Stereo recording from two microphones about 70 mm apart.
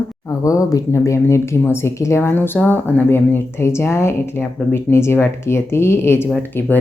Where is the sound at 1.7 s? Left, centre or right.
Left.